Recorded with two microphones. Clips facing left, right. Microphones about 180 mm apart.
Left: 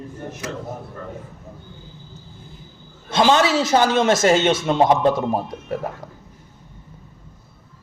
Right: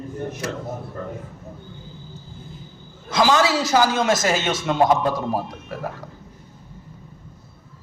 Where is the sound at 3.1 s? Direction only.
25° left (ahead or behind).